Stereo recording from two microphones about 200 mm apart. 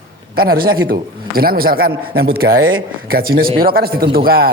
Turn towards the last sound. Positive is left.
turn(degrees=-50)  # may be behind; listen again after turning